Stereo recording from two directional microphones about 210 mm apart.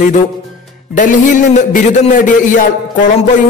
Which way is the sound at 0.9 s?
40° left (ahead or behind).